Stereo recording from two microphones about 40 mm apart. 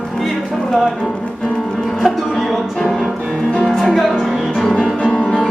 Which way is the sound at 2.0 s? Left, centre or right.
Centre.